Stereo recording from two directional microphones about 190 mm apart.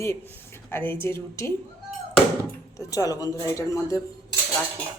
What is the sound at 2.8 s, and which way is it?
Speech, 20° left (ahead or behind).